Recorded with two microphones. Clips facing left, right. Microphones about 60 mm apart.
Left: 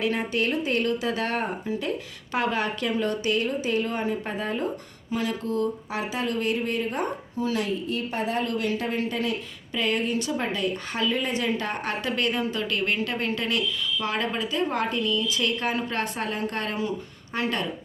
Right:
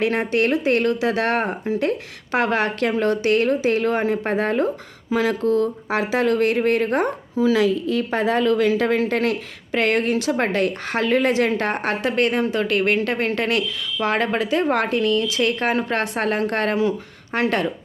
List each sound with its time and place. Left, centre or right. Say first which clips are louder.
0.0 s a woman's voice: right 6 dB; right
5.1 s a woman's voice: right 8 dB; right
15.4 s speech: right 6 dB; right
17.3 s speech: right 7 dB; right